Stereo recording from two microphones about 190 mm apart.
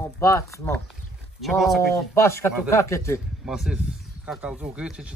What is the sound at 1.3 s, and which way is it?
Speech, centre (ahead or behind).